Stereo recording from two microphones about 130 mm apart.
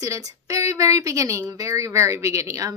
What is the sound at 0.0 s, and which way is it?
A woman's voice, 25° right (ahead or behind).